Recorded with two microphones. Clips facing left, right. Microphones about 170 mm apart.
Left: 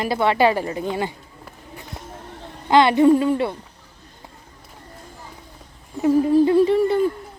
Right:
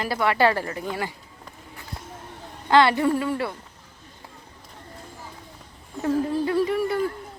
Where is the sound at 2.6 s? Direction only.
20° left (ahead or behind).